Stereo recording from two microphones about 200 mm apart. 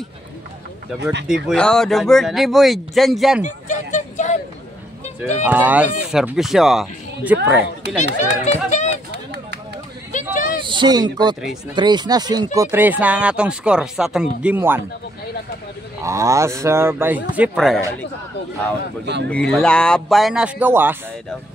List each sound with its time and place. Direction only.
1.2 s speech: centre (ahead or behind)
3.4 s a sound: 35° left (ahead or behind)
5.4 s a man's voice: 10° right (ahead or behind)
8.0 s speech: 35° left (ahead or behind)
10.1 s a sound: 40° left (ahead or behind)
10.7 s speech: 20° right (ahead or behind)
12.5 s a man's voice: 10° right (ahead or behind)
16.0 s a man's voice: 15° right (ahead or behind); by 17.8 s centre (ahead or behind)
19.2 s speech: 5° left (ahead or behind)